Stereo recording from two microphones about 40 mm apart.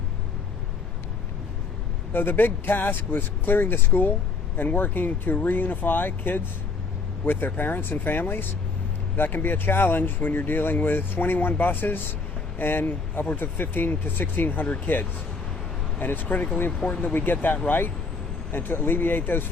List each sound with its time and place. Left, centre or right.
2.1 s speech: left